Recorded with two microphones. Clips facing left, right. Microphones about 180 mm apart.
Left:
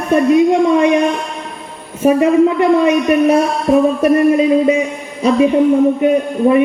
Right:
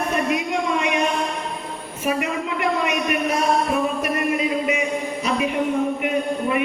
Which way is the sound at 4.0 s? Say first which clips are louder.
Left 11 dB; 30° left (ahead or behind).